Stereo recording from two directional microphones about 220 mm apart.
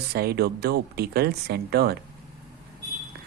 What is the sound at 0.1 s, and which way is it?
A man's voice, 45° right (ahead or behind).